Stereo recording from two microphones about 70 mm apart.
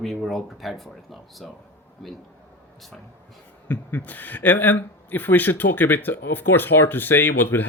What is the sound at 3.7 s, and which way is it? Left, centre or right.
Speech, left.